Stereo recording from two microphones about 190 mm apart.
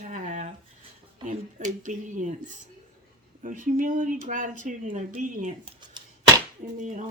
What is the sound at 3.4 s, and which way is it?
Speech, 45° right (ahead or behind).